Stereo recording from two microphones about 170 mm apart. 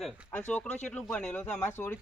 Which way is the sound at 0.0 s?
5° right (ahead or behind).